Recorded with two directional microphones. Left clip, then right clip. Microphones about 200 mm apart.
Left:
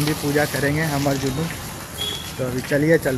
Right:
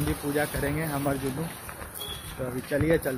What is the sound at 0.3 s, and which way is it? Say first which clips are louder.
Speech: left 8 dB; centre (ahead or behind).